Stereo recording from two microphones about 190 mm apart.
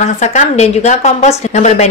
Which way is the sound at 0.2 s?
40° left (ahead or behind).